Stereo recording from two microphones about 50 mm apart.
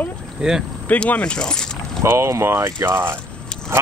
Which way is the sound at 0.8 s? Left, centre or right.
Left.